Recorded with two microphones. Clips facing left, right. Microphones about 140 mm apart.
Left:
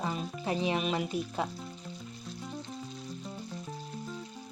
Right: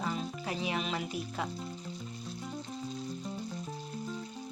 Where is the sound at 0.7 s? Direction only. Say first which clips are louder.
Left 4 dB; 20° left (ahead or behind).